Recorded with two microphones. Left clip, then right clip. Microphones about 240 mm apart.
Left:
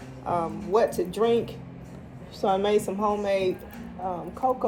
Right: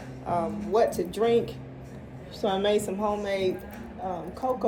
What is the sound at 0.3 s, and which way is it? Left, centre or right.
Speech, left.